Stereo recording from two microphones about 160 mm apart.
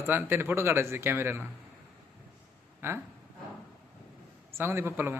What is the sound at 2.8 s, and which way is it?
Speech, 15° right (ahead or behind).